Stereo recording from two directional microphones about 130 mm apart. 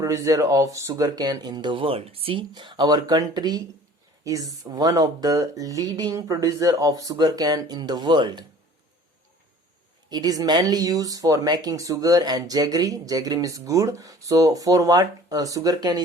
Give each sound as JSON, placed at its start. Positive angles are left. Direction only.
{"t": 0.0, "sound": "speech", "side_deg": -25}
{"t": 2.5, "sound": "speech", "side_deg": -35}
{"t": 10.1, "sound": "speech", "side_deg": -30}